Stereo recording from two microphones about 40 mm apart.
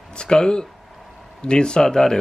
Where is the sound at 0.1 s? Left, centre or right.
Left.